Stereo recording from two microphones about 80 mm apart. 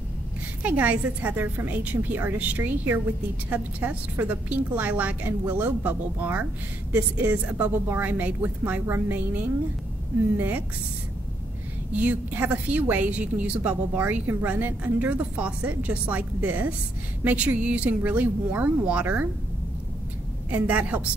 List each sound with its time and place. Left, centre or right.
0.6 s a woman's voice: centre
11.9 s a woman's voice: centre
20.4 s speech: centre